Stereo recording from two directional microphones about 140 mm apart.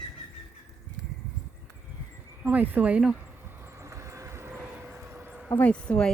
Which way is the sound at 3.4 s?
20° right (ahead or behind).